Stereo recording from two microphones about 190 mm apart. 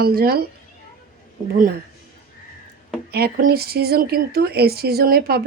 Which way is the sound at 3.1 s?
55° right (ahead or behind).